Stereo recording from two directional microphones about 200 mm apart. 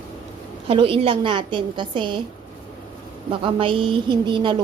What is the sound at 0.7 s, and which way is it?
A woman's voice, 25° right (ahead or behind).